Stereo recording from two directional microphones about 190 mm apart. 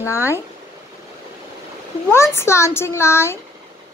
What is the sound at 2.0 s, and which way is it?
Speech, 15° left (ahead or behind).